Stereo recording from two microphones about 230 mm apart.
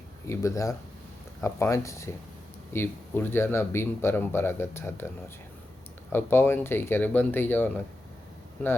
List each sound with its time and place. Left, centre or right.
0.3 s speech: centre